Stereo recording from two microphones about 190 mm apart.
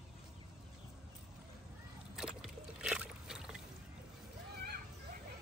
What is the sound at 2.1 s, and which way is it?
Boat, 5° right (ahead or behind).